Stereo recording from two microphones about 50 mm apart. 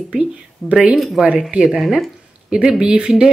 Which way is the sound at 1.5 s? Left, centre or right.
Centre.